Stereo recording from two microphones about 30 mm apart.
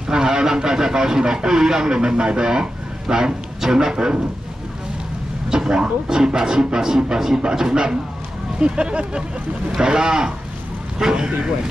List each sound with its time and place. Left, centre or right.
0.1 s speech: right
5.5 s speech: right
9.7 s speech: right